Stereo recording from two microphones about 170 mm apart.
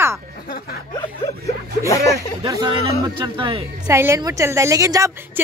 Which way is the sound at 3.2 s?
30° right (ahead or behind).